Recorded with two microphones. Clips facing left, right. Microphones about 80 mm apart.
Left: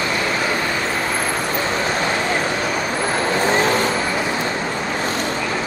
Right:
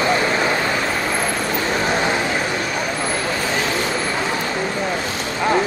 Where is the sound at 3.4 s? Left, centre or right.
Left.